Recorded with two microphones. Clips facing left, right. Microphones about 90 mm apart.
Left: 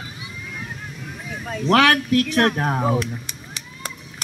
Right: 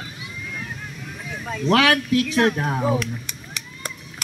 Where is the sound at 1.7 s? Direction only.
40° left (ahead or behind).